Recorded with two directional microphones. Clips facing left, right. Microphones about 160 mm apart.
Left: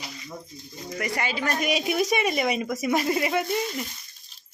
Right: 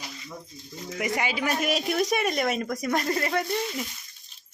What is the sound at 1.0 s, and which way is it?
Speech, 15° right (ahead or behind).